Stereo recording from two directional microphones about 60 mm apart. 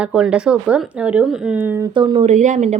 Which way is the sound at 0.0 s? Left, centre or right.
Centre.